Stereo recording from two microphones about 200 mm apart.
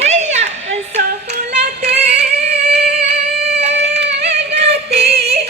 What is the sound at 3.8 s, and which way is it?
Female singing, 60° right (ahead or behind).